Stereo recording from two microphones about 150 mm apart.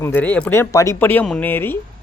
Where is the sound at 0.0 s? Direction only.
15° left (ahead or behind).